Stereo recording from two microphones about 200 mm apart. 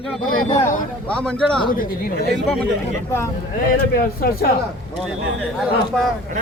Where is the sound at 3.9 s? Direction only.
50° left (ahead or behind).